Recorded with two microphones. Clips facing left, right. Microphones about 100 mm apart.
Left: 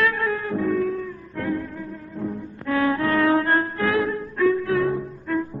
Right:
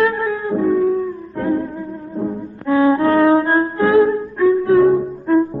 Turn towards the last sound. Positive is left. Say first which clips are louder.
# right 10 dB
turn(degrees=-30)  # may be behind; listen again after turning